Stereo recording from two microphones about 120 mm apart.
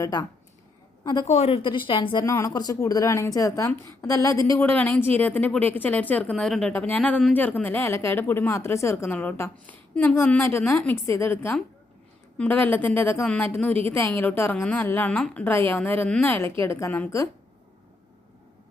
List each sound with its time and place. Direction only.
0.0 s speech: 30° left (ahead or behind)
1.3 s speech: 55° left (ahead or behind)
2.2 s a woman's voice: 25° left (ahead or behind)
4.7 s a woman's voice: 15° left (ahead or behind)
6.3 s a woman's voice: centre (ahead or behind); by 9.1 s 25° left (ahead or behind)
9.1 s a woman's voice: 15° left (ahead or behind)